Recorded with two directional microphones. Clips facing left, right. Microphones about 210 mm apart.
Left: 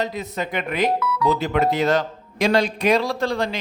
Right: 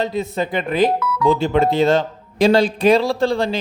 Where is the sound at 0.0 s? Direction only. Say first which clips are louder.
Right 5 dB; 30° right (ahead or behind).